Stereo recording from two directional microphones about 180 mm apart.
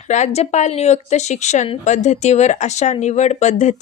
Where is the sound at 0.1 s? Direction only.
40° left (ahead or behind).